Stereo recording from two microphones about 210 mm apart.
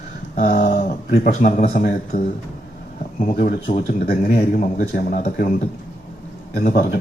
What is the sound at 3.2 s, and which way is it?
A man's voice, 40° left (ahead or behind).